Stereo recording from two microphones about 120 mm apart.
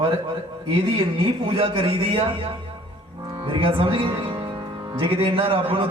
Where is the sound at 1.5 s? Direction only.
50° right (ahead or behind).